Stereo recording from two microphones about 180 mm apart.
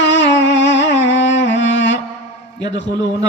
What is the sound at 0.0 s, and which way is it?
Music, 80° left.